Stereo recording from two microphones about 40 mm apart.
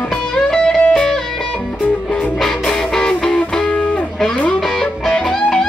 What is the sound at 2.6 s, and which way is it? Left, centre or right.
Music, centre.